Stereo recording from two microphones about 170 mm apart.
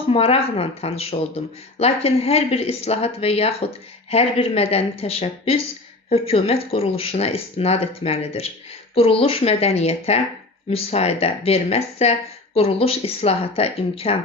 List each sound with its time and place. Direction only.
0.1 s speech: 35° left (ahead or behind)